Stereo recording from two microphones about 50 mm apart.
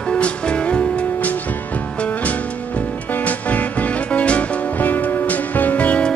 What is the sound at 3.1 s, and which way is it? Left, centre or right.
Music, left.